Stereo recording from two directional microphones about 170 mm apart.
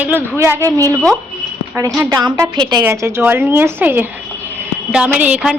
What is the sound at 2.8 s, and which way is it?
Speech, 15° right (ahead or behind).